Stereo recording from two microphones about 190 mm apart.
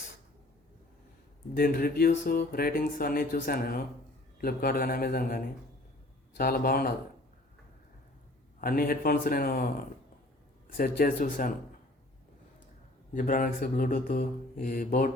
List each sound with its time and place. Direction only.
1.5 s speech: 50° left (ahead or behind)
8.6 s speech: 50° left (ahead or behind)
10.7 s speech: 50° left (ahead or behind)
13.1 s speech: 45° left (ahead or behind)